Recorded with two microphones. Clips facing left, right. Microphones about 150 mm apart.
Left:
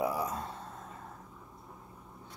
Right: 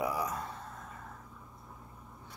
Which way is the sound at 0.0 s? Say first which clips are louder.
Left 1 dB; 30° left (ahead or behind).